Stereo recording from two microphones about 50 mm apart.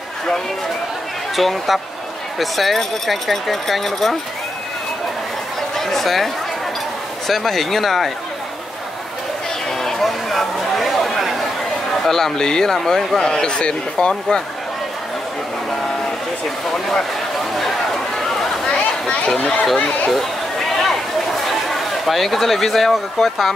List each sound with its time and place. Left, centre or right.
1.3 s speech: centre
5.8 s speech: centre
9.8 s chatter: centre
12.0 s speech: centre
17.6 s a sound: centre
19.0 s chatter: left
19.4 s speech: centre
20.1 s chatter: centre